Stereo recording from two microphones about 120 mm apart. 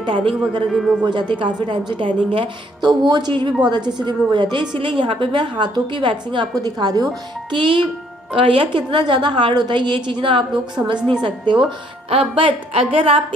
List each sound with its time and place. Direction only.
0.0 s speech: 45° right (ahead or behind)
0.7 s speech: centre (ahead or behind)
1.0 s a woman's voice: 40° right (ahead or behind)